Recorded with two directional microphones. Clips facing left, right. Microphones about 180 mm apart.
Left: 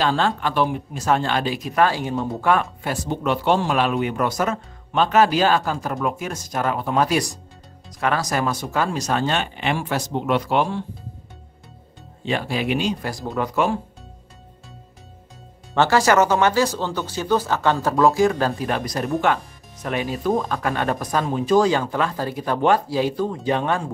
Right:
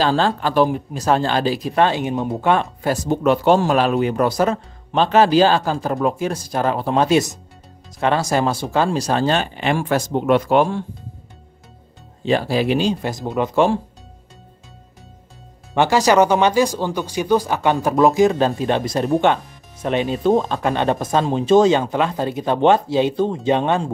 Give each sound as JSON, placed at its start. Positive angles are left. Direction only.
{"t": 0.0, "sound": "speech", "side_deg": -35}
{"t": 2.8, "sound": "speech", "side_deg": -40}
{"t": 12.3, "sound": "speech", "side_deg": -35}
{"t": 15.7, "sound": "speech", "side_deg": -15}